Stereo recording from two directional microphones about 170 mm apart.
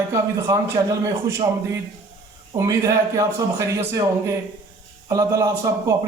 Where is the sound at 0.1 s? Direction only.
20° right (ahead or behind).